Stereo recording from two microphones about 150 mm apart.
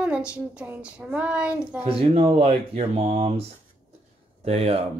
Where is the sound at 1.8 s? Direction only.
40° right (ahead or behind).